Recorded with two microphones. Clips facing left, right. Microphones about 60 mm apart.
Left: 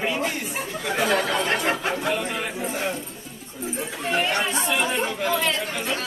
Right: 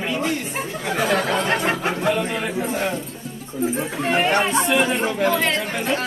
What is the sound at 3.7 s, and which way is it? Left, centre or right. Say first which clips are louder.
Speech: right 2 dB; right.